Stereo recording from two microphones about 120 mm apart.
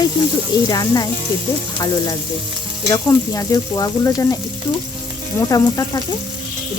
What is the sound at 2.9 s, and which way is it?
Speech, 30° left (ahead or behind).